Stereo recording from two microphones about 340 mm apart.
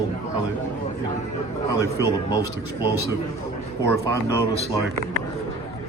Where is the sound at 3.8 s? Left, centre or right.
Centre.